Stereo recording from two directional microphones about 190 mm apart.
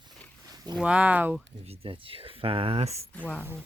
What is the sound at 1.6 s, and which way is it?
Speech, 30° right (ahead or behind).